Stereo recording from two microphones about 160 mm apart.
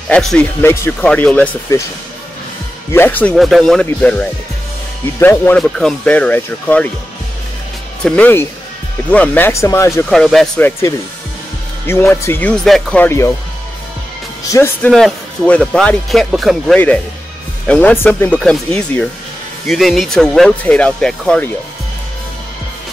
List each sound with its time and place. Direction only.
0.1 s speech: 5° left (ahead or behind)
2.9 s speech: 10° left (ahead or behind)
3.3 s speech: centre (ahead or behind)
8.0 s speech: 10° left (ahead or behind)
10.0 s speech: centre (ahead or behind)
11.8 s speech: 15° left (ahead or behind)
13.0 s speech: 15° left (ahead or behind)
14.5 s speech: 15° left (ahead or behind)
14.9 s speech: centre (ahead or behind)
16.7 s speech: 10° left (ahead or behind)